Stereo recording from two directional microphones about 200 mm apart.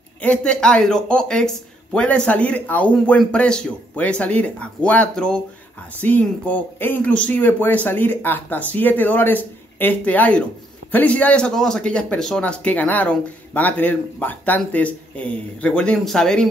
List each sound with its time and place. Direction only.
0.2 s speech: 5° left (ahead or behind)